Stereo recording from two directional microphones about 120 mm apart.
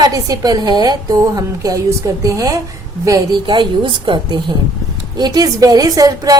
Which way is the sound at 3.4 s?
40° right (ahead or behind).